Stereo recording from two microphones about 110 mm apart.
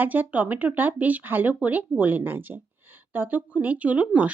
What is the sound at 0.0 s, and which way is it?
Speech, 15° right (ahead or behind).